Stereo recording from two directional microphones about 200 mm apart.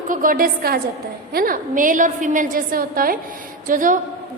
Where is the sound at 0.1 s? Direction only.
45° right (ahead or behind).